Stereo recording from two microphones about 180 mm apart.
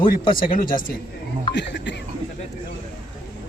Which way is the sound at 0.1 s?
50° left (ahead or behind).